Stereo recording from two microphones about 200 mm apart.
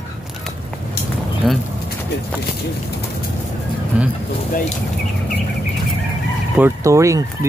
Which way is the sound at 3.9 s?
5° right (ahead or behind).